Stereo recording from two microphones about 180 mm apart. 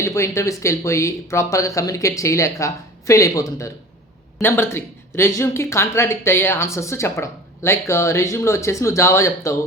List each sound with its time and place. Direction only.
0.0 s speech: 15° left (ahead or behind)